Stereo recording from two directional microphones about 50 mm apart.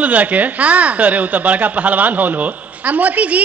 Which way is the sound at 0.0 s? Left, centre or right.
Right.